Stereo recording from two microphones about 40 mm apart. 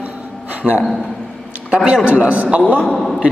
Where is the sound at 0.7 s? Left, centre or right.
Right.